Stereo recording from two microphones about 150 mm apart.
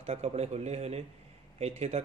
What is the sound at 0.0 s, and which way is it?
A man's voice, 45° right (ahead or behind).